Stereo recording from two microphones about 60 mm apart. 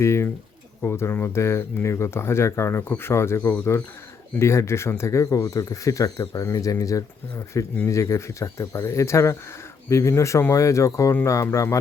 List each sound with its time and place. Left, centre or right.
0.0 s speech: left